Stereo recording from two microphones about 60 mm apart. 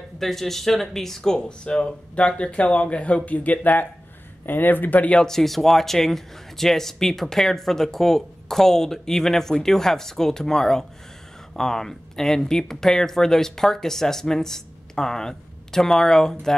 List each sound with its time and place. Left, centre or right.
0.2 s speech: centre; by 5.2 s left
5.2 s speech: centre